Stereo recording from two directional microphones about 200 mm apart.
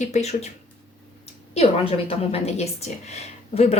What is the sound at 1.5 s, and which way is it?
Speech, 30° left (ahead or behind).